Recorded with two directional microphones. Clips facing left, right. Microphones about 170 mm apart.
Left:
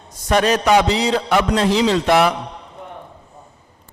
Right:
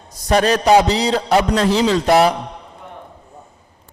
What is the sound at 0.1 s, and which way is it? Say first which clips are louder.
A man's voice: right 1 dB; 35° right (ahead or behind).